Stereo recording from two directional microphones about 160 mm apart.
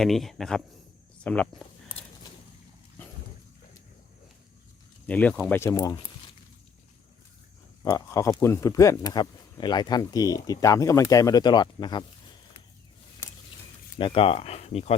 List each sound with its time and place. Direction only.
0.0 s speech: centre (ahead or behind)
5.0 s speech: 10° left (ahead or behind)
7.9 s speech: 20° left (ahead or behind)
14.0 s speech: 35° left (ahead or behind)